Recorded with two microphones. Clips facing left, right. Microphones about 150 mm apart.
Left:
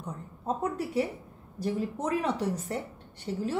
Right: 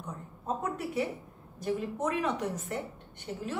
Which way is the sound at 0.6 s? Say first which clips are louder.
Left 4 dB; 35° left (ahead or behind).